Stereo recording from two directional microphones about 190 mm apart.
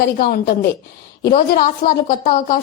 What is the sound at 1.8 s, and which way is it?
Speech, 45° left (ahead or behind).